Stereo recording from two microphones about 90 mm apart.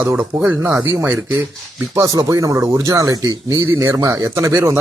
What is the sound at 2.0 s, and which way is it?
Speech, 40° right (ahead or behind).